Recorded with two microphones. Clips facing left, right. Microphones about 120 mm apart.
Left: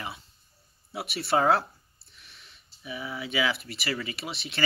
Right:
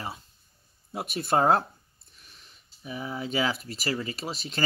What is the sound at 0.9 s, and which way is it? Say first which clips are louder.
Speech: right 1 dB; 45° right (ahead or behind).